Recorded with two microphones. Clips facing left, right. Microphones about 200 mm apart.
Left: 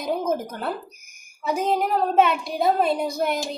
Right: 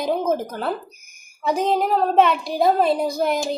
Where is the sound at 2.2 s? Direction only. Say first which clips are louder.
Right 3 dB; centre (ahead or behind).